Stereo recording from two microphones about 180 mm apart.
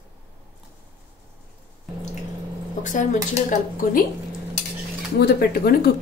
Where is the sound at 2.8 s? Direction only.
45° left (ahead or behind).